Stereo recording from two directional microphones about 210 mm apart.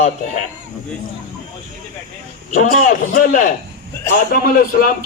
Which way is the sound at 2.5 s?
40° left (ahead or behind).